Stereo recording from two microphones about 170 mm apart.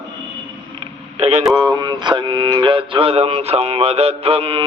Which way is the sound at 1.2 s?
40° right (ahead or behind).